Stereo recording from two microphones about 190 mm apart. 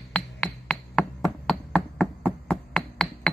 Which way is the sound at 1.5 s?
5° left (ahead or behind).